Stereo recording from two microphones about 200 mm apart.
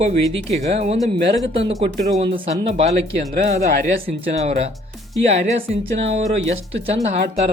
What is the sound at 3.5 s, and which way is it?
Speech, 35° right (ahead or behind).